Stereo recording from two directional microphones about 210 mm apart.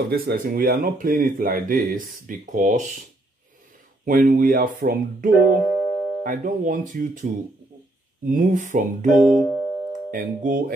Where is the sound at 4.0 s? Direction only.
40° right (ahead or behind).